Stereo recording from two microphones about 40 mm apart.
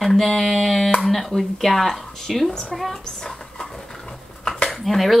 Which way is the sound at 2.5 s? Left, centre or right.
Centre.